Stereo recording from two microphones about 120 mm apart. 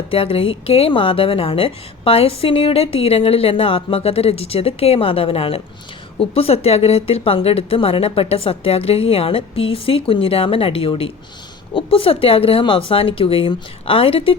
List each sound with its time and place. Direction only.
0.1 s a woman's voice: 50° left (ahead or behind)